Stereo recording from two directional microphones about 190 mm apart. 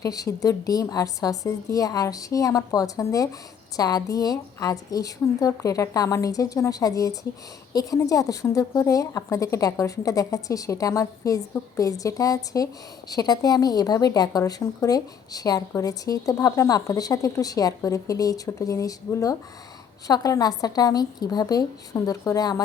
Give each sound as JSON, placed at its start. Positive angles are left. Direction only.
{"t": 0.0, "sound": "a woman's voice", "side_deg": 20}